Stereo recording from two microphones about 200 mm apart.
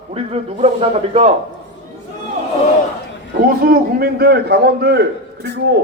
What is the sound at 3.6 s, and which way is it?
A man's voice, 50° right (ahead or behind).